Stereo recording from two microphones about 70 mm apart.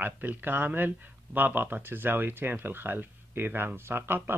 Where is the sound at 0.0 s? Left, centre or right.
Right.